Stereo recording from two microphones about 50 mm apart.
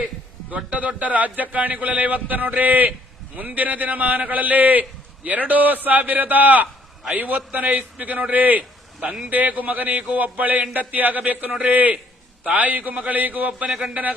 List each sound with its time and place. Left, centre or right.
0.5 s a man's voice: right
13.7 s speech: centre